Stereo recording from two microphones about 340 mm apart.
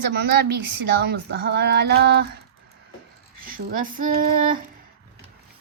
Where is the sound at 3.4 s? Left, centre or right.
Right.